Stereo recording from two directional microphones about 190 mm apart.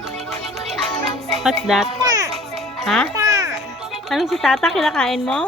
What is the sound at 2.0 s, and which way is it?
Music, 20° right (ahead or behind).